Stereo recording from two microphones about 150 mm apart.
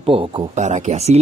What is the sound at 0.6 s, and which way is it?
Speech, 50° right (ahead or behind).